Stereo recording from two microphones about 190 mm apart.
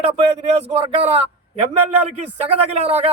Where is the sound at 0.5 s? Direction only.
30° right (ahead or behind).